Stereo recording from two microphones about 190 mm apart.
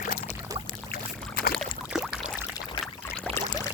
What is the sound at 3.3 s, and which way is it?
Pour, 20° left (ahead or behind).